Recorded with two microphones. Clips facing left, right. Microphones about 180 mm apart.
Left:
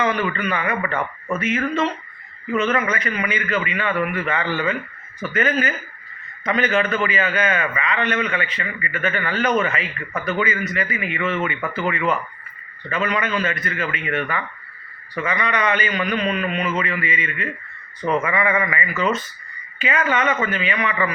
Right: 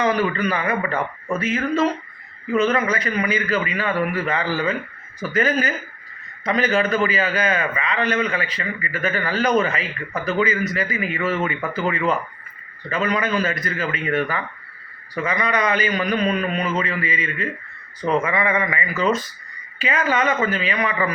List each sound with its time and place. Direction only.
0.0 s a man's voice: 35° right (ahead or behind)
12.9 s a man's voice: 35° right (ahead or behind)